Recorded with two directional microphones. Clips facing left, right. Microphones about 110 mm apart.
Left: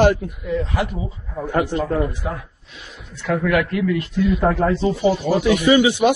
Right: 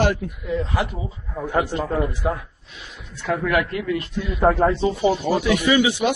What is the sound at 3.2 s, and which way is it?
Speech, 30° right (ahead or behind).